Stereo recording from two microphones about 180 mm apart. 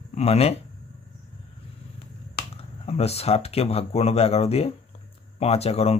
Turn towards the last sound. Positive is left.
turn(degrees=35)  # may be behind; listen again after turning